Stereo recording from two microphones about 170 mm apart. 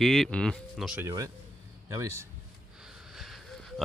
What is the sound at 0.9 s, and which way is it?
A man's voice, 20° right (ahead or behind).